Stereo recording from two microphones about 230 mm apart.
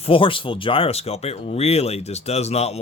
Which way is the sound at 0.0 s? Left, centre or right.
Left.